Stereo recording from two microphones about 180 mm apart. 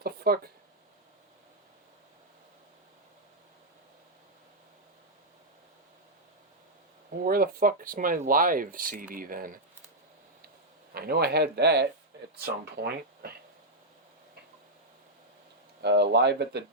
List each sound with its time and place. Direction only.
0.0 s a sound: 60° right (ahead or behind)
7.3 s speech: 55° right (ahead or behind)
10.9 s speech: 60° right (ahead or behind)
15.8 s speech: 65° right (ahead or behind)